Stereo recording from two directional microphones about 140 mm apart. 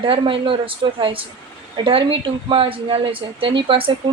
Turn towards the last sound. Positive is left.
turn(degrees=-40)  # may be behind; listen again after turning